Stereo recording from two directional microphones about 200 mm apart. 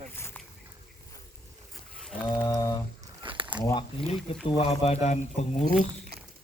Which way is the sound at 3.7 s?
25° left (ahead or behind).